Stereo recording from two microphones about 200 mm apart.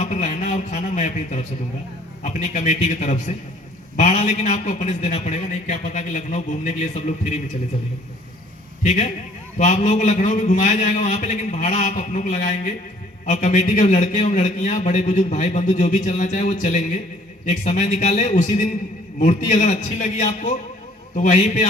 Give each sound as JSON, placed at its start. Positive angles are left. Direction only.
{"t": 0.0, "sound": "a man's voice", "side_deg": 35}
{"t": 8.8, "sound": "a man's voice", "side_deg": 35}